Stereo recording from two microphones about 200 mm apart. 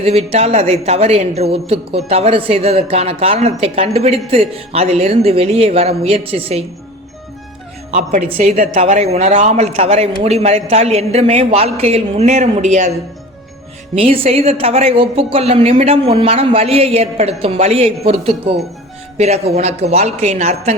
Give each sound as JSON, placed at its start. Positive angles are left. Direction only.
{"t": 0.0, "sound": "a man's voice", "side_deg": -30}
{"t": 7.9, "sound": "a woman's voice", "side_deg": -35}
{"t": 13.9, "sound": "a man's voice", "side_deg": -30}